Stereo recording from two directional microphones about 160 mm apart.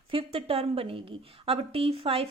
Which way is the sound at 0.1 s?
35° right (ahead or behind).